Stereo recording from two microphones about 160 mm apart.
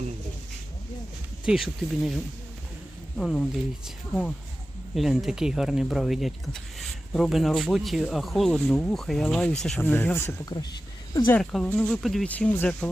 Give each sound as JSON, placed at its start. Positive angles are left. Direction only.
{"t": 1.5, "sound": "speech", "side_deg": 0}
{"t": 3.2, "sound": "speech", "side_deg": 5}
{"t": 4.9, "sound": "speech", "side_deg": 0}
{"t": 11.3, "sound": "speech", "side_deg": 5}